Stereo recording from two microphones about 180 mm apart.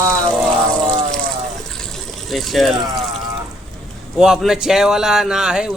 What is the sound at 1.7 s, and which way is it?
Water, centre (ahead or behind).